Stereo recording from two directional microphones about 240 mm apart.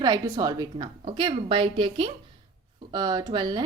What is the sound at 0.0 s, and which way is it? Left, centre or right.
A woman's voice, centre.